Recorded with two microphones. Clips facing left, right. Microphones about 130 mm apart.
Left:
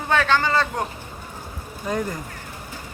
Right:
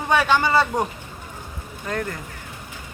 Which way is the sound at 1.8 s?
15° left (ahead or behind).